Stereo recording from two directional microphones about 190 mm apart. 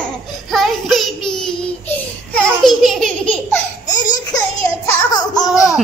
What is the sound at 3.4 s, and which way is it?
Laughter, 20° left (ahead or behind).